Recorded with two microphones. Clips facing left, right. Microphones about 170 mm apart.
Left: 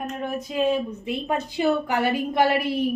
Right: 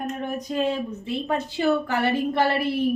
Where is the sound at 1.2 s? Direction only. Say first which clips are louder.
Even; 15° left (ahead or behind).